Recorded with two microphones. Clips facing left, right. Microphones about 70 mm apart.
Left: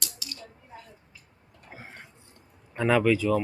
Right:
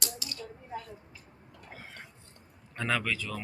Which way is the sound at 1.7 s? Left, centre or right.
Left.